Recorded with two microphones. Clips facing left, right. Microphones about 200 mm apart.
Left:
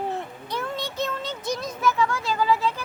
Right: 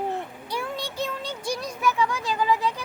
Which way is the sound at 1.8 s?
15° right (ahead or behind).